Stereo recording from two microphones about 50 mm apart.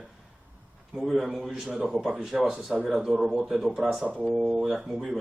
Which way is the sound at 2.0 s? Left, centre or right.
Centre.